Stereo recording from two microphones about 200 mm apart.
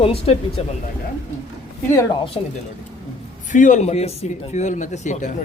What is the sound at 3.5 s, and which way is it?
Speech, 40° left (ahead or behind).